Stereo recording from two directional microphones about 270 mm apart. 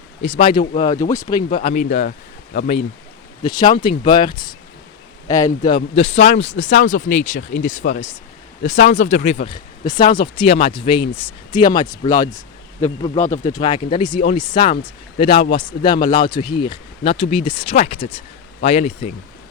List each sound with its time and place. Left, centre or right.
0.3 s speech: left
3.4 s speech: centre
12.8 s speech: left
13.4 s speech: centre